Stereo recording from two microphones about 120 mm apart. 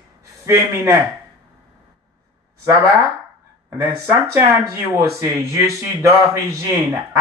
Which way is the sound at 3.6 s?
25° right (ahead or behind).